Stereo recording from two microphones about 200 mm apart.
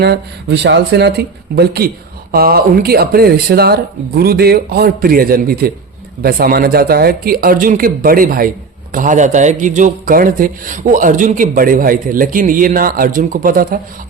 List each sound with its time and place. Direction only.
0.0 s speech: 55° right (ahead or behind)